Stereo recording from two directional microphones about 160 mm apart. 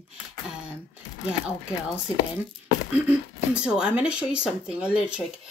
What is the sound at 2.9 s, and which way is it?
Speech, 5° right (ahead or behind).